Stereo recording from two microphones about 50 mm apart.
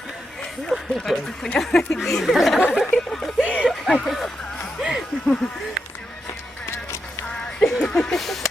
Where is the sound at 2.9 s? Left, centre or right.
Centre.